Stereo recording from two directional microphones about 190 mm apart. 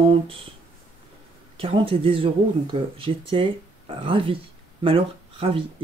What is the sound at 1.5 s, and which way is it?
Speech, 30° right (ahead or behind).